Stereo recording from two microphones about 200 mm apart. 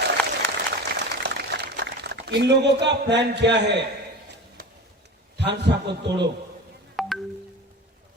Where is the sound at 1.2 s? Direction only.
60° right (ahead or behind).